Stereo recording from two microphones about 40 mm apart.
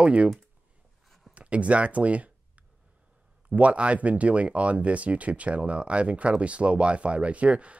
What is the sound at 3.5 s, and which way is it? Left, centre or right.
Speech, right.